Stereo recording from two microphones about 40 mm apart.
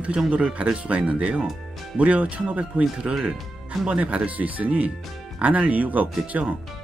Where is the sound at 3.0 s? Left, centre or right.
Centre.